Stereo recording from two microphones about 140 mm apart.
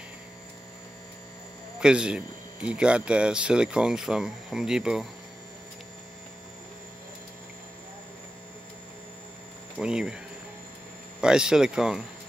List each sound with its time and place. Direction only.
1.8 s speech: 5° right (ahead or behind)
9.8 s speech: 5° right (ahead or behind)